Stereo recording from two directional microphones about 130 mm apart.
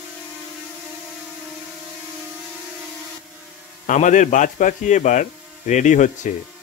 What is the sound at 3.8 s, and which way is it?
Speech, 75° left (ahead or behind).